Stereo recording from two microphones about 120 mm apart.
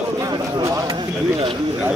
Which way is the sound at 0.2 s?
30° right (ahead or behind).